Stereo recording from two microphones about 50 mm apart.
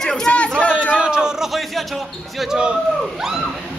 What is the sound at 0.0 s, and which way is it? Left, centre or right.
Chatter, centre.